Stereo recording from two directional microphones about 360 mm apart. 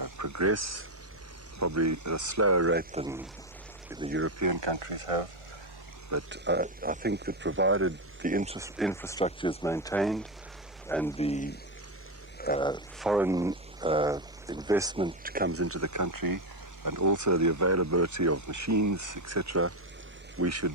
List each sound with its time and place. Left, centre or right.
0.0 s speech: right
2.7 s speech: centre
4.1 s speech: right
4.4 s speech: right
6.3 s speech: right
8.2 s speech: right
8.5 s speech: centre
8.9 s speech: centre
11.2 s speech: centre
12.4 s a sound: left
13.0 s speech: centre
15.2 s speech: right
15.5 s speech: right